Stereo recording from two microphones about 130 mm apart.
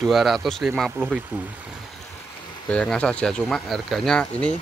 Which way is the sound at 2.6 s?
10° left (ahead or behind).